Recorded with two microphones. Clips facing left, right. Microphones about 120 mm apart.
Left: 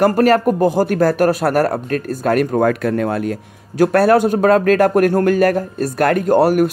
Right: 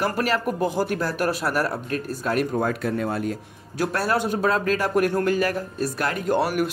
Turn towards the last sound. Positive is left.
turn(degrees=45)  # may be behind; listen again after turning